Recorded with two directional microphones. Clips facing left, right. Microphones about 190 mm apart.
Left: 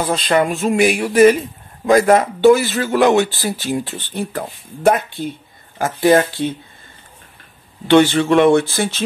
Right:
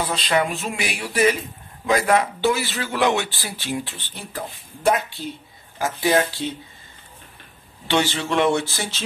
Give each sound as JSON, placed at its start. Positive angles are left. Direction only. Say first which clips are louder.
{"t": 0.1, "sound": "speech", "louder": "left 6 dB", "side_deg": 50}
{"t": 7.9, "sound": "speech", "louder": "left 10 dB", "side_deg": 55}